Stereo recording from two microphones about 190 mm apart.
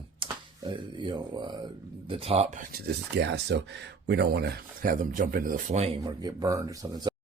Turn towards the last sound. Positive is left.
turn(degrees=-20)  # may be behind; listen again after turning